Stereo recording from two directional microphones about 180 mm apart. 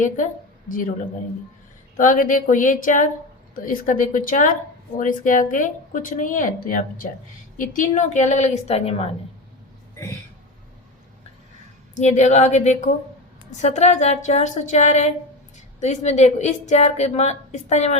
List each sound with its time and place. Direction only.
0.7 s a woman's voice: 50° left (ahead or behind)
2.0 s a woman's voice: 45° left (ahead or behind)
11.9 s a woman's voice: 40° left (ahead or behind)